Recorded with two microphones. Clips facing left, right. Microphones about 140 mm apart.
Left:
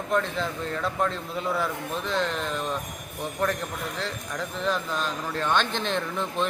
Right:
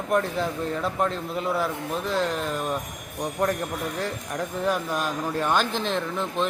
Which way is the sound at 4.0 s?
15° right (ahead or behind).